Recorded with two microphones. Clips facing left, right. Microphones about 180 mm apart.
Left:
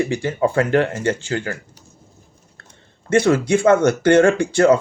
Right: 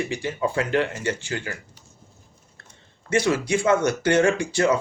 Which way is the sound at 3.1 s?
50° left (ahead or behind).